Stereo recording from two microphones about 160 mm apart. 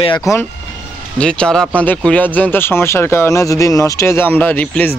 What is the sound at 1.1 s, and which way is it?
Speech, 5° left (ahead or behind).